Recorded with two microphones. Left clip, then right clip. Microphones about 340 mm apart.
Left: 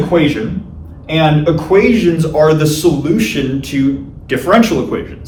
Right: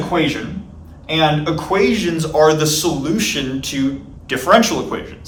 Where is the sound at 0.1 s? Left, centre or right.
Centre.